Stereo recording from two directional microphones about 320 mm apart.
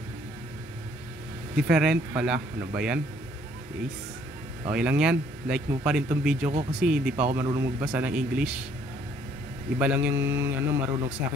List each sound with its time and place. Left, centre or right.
1.6 s speech: centre
4.6 s speech: centre
9.8 s speech: centre